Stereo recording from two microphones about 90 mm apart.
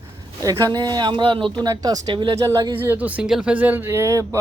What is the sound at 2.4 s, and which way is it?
Speech, 35° right (ahead or behind).